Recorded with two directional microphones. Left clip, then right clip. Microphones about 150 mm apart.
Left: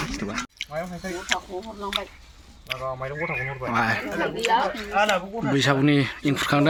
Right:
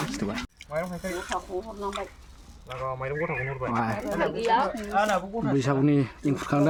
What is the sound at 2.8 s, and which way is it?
Speech, 30° right (ahead or behind).